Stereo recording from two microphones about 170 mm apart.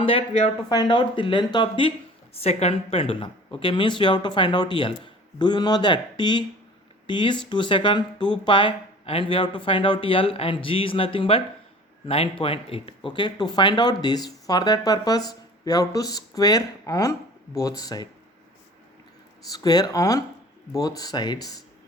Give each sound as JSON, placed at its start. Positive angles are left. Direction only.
{"t": 0.0, "sound": "speech", "side_deg": 30}
{"t": 19.5, "sound": "speech", "side_deg": 20}